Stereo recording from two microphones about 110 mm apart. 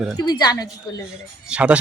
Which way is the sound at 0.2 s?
40° left (ahead or behind).